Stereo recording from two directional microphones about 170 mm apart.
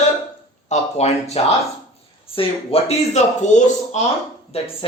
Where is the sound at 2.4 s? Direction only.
35° left (ahead or behind).